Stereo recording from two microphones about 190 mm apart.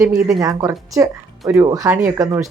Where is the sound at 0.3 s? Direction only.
20° right (ahead or behind).